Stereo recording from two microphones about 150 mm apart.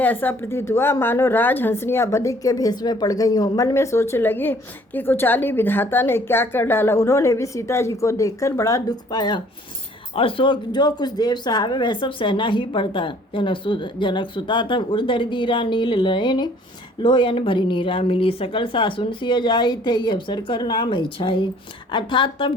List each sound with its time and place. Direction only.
0.0 s a woman's voice: 10° left (ahead or behind); by 22.5 s 35° left (ahead or behind)